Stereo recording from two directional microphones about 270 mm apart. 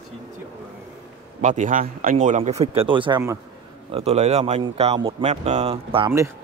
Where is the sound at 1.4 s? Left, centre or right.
Right.